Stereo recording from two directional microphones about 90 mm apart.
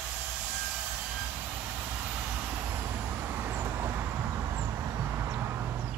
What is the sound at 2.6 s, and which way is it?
Vehicle, 30° right (ahead or behind).